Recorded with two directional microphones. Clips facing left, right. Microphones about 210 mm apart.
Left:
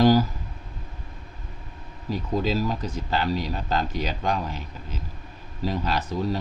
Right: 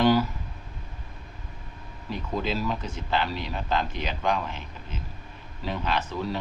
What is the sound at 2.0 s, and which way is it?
Speech, 40° left (ahead or behind).